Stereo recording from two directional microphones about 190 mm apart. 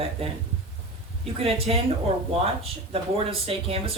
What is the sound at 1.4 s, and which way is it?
Speech, 30° right (ahead or behind).